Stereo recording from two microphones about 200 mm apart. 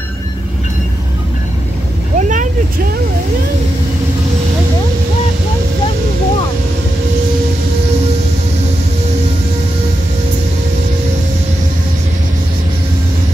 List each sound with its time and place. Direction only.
2.1 s vehicle: 40° right (ahead or behind)